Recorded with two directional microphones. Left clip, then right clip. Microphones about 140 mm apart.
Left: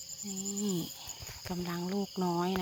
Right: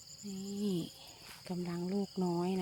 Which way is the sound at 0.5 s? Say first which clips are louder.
Left 1 dB; centre (ahead or behind).